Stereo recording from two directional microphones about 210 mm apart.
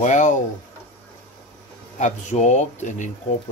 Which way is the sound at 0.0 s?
35° left (ahead or behind).